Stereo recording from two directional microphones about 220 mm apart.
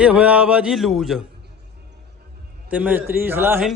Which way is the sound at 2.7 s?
5° right (ahead or behind).